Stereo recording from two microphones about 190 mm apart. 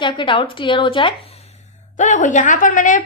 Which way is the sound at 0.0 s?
25° left (ahead or behind).